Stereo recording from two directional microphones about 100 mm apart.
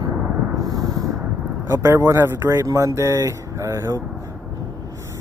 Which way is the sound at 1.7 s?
30° right (ahead or behind).